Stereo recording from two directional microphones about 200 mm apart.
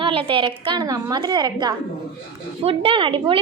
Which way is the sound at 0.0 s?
25° right (ahead or behind).